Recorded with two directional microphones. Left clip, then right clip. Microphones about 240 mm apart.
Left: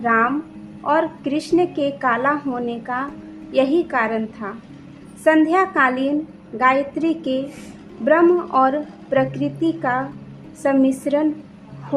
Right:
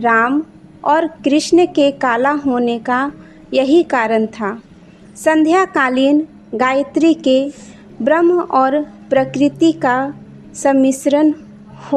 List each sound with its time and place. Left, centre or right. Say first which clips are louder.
0.0 s a woman's voice: right 5 dB; right